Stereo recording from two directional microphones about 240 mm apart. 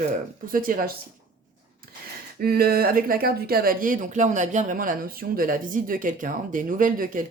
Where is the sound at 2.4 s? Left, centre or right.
Right.